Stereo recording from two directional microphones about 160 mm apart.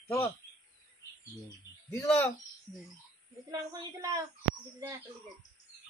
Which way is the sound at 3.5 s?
20° right (ahead or behind).